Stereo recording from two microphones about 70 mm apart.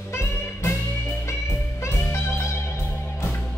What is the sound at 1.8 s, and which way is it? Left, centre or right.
Music, left.